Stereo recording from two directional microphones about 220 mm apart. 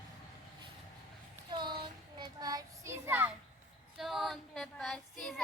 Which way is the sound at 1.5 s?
20° right (ahead or behind).